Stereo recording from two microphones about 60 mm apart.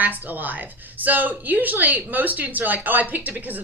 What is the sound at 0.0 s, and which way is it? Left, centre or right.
A woman's voice, right.